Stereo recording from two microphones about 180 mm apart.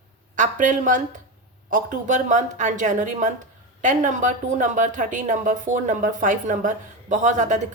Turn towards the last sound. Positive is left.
turn(degrees=-45)  # may be behind; listen again after turning